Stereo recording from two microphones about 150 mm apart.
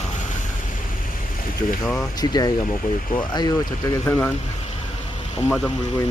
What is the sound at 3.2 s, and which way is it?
Speech, 30° left (ahead or behind).